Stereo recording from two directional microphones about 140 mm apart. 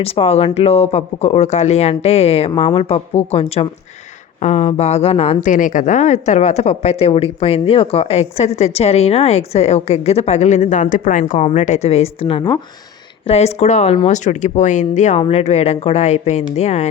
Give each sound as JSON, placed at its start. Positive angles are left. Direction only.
{"t": 0.0, "sound": "a woman's voice", "side_deg": 45}
{"t": 11.4, "sound": "a woman's voice", "side_deg": 60}